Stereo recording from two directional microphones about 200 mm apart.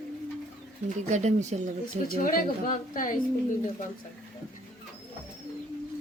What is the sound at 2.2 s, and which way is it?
Speech, 40° left (ahead or behind).